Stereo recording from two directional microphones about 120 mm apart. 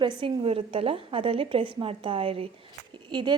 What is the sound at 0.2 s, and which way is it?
A woman's voice, 50° right (ahead or behind).